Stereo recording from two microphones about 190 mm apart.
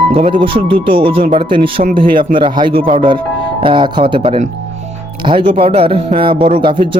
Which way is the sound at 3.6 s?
25° right (ahead or behind).